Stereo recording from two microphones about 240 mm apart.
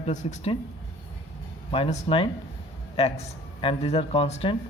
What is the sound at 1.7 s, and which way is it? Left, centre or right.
Speech, left.